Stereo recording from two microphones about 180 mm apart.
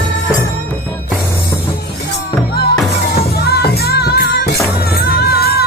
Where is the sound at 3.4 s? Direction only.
65° left (ahead or behind).